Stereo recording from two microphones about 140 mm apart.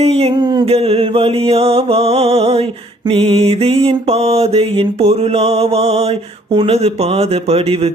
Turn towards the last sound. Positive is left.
turn(degrees=-45)  # may be behind; listen again after turning